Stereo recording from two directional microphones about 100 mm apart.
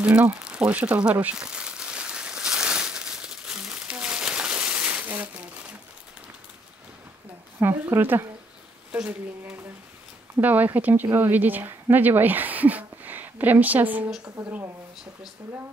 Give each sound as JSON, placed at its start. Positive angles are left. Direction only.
{"t": 0.0, "sound": "crumpling", "side_deg": -10}
{"t": 7.6, "sound": "speech", "side_deg": -20}
{"t": 8.9, "sound": "speech", "side_deg": -10}
{"t": 14.2, "sound": "speech", "side_deg": -35}